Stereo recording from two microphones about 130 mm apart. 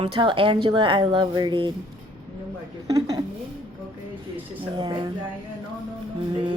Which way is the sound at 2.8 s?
25° right (ahead or behind).